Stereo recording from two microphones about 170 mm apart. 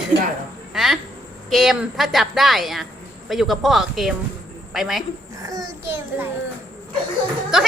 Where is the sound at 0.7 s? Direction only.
Centre (ahead or behind).